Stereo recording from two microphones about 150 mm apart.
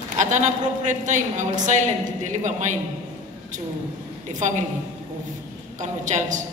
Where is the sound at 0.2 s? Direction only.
55° right (ahead or behind).